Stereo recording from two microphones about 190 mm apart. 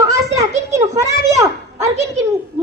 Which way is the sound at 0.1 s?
15° right (ahead or behind).